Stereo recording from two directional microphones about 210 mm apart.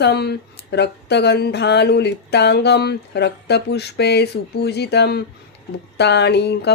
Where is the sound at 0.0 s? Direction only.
50° left (ahead or behind).